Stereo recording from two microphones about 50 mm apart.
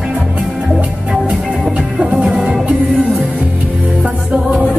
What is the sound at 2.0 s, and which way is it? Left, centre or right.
Music, centre.